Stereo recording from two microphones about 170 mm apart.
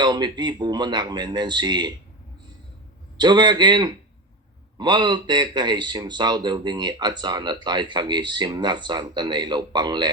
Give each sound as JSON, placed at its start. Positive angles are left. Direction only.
{"t": 0.0, "sound": "a man's voice", "side_deg": -25}
{"t": 3.2, "sound": "a man's voice", "side_deg": -25}